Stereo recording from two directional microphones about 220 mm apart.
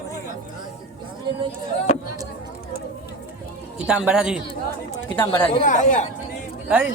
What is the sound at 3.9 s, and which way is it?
Speech, 5° right (ahead or behind).